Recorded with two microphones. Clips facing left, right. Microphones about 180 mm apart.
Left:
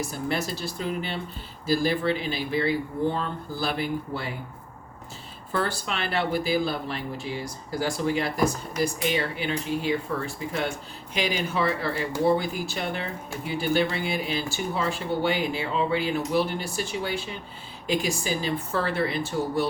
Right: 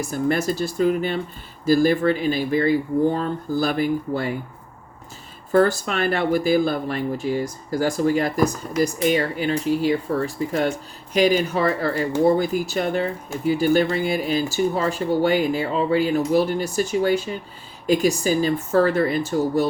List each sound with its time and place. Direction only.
0.1 s speech: 45° right (ahead or behind)
5.5 s speech: 45° right (ahead or behind)